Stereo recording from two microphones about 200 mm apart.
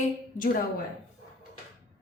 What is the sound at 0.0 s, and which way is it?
Speech, 45° left (ahead or behind).